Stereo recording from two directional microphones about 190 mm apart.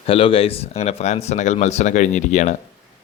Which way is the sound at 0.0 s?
30° left (ahead or behind).